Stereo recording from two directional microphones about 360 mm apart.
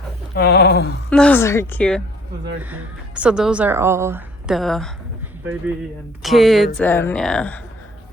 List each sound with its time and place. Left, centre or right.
0.3 s speech: left
1.1 s speech: centre
6.2 s speech: centre